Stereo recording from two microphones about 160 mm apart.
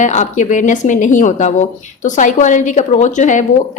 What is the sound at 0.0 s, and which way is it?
A woman's voice, 45° left (ahead or behind).